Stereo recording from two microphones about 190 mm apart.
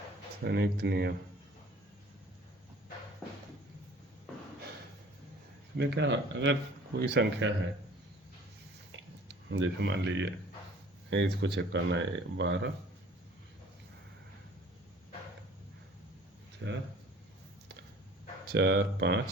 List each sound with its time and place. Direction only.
0.4 s speech: 60° right (ahead or behind)
5.7 s speech: 60° right (ahead or behind)
9.5 s speech: 75° right (ahead or behind)
16.6 s speech: 70° right (ahead or behind)
18.4 s speech: 65° right (ahead or behind)